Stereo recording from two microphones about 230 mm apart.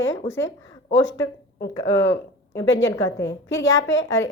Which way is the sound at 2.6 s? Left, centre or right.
Left.